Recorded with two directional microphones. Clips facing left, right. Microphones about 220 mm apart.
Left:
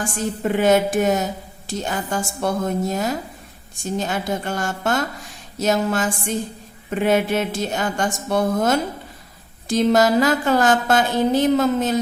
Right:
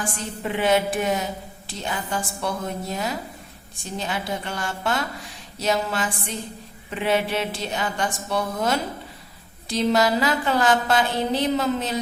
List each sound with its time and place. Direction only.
0.0 s a woman's voice: 45° left (ahead or behind)